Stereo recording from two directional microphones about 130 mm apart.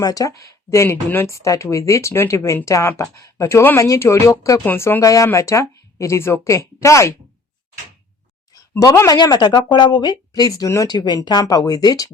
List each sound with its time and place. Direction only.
0.0 s speech: 25° left (ahead or behind)
8.8 s speech: 25° left (ahead or behind)